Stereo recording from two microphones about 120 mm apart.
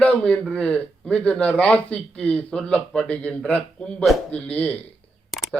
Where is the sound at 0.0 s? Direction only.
10° left (ahead or behind).